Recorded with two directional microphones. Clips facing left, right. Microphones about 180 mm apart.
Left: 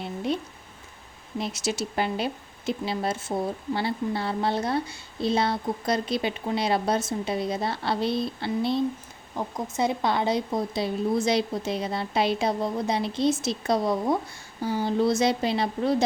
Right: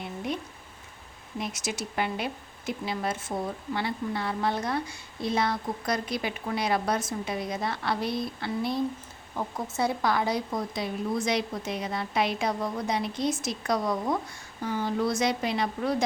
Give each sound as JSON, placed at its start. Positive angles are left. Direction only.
{"t": 1.4, "sound": "a woman's voice", "side_deg": 30}
{"t": 9.3, "sound": "a woman's voice", "side_deg": 15}